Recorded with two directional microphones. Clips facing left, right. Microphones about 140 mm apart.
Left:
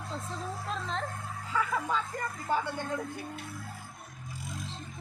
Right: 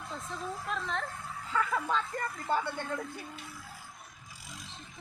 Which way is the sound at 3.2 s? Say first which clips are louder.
Left 4 dB; 55° left (ahead or behind).